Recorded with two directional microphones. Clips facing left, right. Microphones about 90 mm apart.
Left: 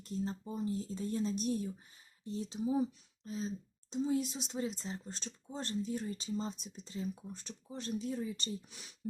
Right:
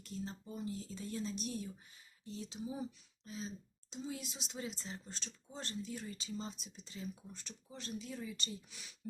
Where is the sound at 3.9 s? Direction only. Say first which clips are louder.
Left 11 dB; 50° left (ahead or behind).